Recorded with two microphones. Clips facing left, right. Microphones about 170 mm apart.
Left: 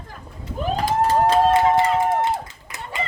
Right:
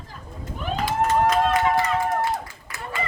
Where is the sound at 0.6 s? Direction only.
40° left (ahead or behind).